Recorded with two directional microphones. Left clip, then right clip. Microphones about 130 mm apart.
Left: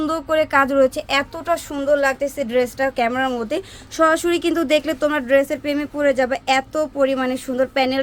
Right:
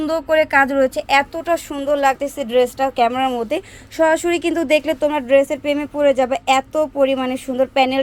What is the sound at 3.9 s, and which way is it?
Speech, centre (ahead or behind).